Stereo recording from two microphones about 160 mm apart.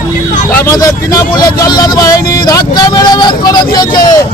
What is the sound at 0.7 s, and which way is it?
Speech, 20° left (ahead or behind).